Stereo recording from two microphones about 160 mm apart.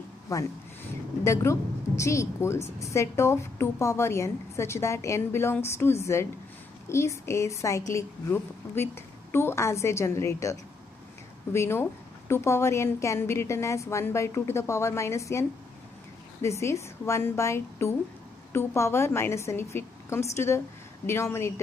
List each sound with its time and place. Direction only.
0.3 s a woman's voice: 20° left (ahead or behind)